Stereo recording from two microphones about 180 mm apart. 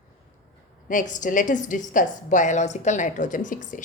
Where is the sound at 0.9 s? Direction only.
45° left (ahead or behind).